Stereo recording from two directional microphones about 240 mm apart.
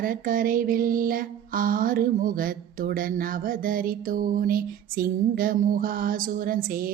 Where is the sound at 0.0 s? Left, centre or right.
Right.